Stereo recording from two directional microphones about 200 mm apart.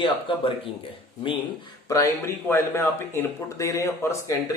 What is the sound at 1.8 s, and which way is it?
Speech, 15° left (ahead or behind).